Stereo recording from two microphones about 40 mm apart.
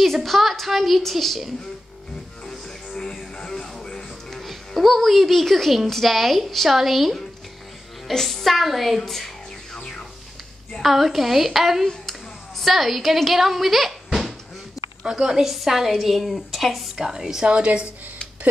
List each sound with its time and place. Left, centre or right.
0.0 s a woman's voice: centre
2.4 s music: centre
4.4 s a woman's voice: centre
8.1 s a woman's voice: centre
10.7 s a woman's voice: centre
12.1 s a sound: centre
15.0 s a woman's voice: centre
15.4 s a woman's voice: centre
16.9 s a woman's voice: centre
17.5 s a woman's voice: right